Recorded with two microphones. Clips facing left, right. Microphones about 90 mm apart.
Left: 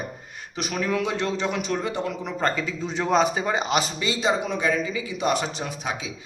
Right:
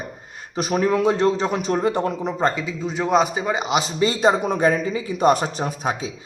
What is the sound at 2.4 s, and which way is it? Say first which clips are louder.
A man's voice: right 2 dB; 20° right (ahead or behind).